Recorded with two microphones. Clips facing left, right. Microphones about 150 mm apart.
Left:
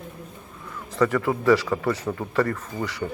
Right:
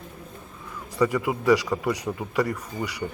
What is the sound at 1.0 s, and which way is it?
A man's voice, 15° right (ahead or behind).